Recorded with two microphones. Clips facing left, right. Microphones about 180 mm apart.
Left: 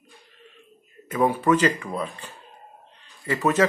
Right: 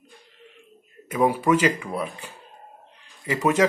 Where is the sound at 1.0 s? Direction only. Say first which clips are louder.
Even; 15° right (ahead or behind).